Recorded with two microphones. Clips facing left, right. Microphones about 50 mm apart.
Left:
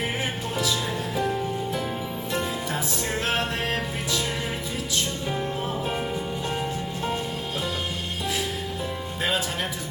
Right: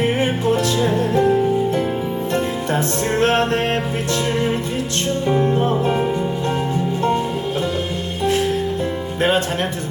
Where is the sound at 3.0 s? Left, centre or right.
Right.